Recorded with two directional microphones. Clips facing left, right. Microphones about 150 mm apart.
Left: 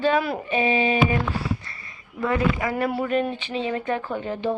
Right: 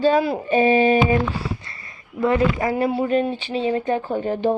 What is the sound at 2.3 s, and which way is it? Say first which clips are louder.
Speech: right 4 dB; 35° right (ahead or behind).